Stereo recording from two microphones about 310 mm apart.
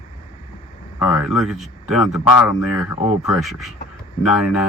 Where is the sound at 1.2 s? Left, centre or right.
Centre.